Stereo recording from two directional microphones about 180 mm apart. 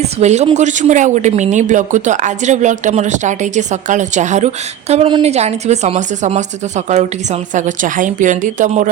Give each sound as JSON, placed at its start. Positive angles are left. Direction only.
{"t": 0.0, "sound": "speech", "side_deg": -40}